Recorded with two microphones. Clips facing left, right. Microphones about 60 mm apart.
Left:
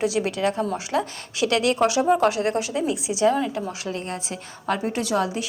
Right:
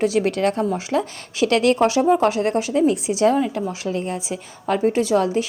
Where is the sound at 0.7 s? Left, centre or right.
Right.